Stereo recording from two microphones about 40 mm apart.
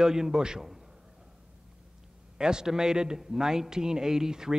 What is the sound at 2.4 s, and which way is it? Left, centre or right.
A man's voice, centre.